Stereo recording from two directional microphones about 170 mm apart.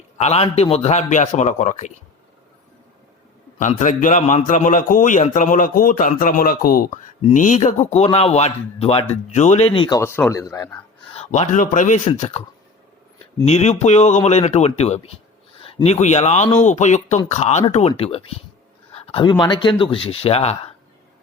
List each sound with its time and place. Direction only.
0.2 s a man's voice: 40° left (ahead or behind)
3.6 s a man's voice: 45° left (ahead or behind); by 10.0 s 30° left (ahead or behind)
10.0 s a man's voice: 15° left (ahead or behind)
11.2 s a man's voice: 45° left (ahead or behind)
13.4 s a man's voice: 40° left (ahead or behind)